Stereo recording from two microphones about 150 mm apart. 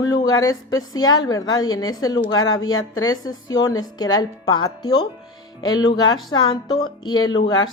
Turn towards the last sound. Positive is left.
turn(degrees=25)  # may be behind; listen again after turning